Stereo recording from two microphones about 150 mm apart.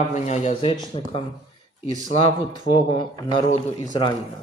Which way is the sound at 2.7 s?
30° left (ahead or behind).